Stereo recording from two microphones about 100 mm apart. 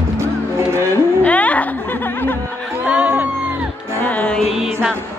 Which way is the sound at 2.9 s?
15° right (ahead or behind).